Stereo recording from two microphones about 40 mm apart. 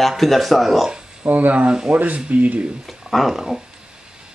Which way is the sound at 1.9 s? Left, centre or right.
Right.